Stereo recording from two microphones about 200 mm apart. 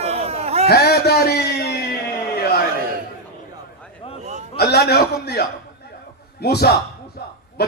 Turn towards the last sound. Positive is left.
turn(degrees=55)  # may be behind; listen again after turning